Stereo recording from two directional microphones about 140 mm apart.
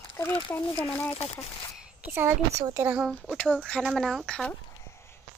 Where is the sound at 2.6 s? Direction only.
20° right (ahead or behind).